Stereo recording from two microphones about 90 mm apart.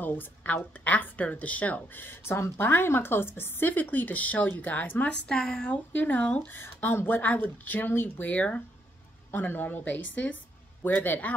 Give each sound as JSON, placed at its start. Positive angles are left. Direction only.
{"t": 0.0, "sound": "a woman's voice", "side_deg": 20}
{"t": 5.3, "sound": "speech", "side_deg": 5}
{"t": 5.9, "sound": "a woman's voice", "side_deg": 20}